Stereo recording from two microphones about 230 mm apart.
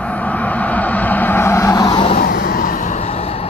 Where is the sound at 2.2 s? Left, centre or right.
Left.